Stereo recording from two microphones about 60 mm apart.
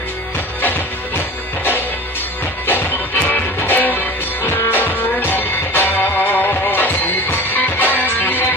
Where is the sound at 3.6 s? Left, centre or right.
Left.